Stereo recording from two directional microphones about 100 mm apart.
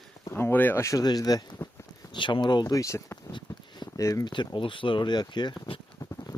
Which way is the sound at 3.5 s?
50° left (ahead or behind).